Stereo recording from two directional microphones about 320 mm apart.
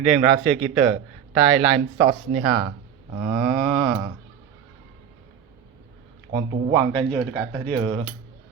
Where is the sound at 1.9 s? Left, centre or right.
Right.